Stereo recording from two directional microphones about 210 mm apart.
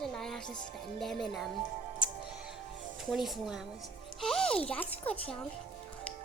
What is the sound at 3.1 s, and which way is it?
Speech, centre (ahead or behind).